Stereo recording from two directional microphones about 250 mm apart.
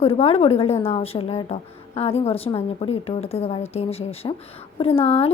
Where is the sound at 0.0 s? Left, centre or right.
Left.